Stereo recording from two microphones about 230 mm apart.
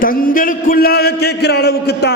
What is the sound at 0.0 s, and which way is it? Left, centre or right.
A man's voice, left.